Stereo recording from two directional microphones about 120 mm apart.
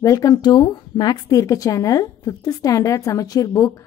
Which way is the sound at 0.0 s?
30° left (ahead or behind).